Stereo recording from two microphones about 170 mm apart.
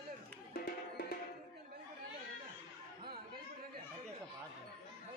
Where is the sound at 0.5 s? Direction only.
65° left (ahead or behind).